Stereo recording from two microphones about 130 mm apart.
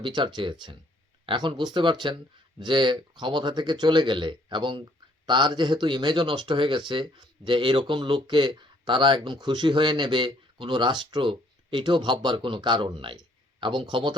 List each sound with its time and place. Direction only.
0.0 s speech: 35° right (ahead or behind)